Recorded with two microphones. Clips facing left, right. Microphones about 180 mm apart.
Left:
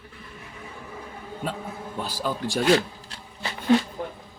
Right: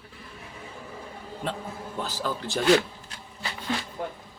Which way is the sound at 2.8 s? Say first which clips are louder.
Left 2 dB; 35° left (ahead or behind).